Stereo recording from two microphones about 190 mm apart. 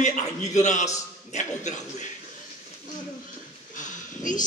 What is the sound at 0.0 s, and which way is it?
Music, 40° left (ahead or behind).